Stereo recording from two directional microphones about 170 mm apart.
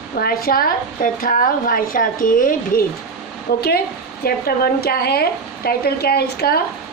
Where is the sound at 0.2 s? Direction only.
60° left (ahead or behind).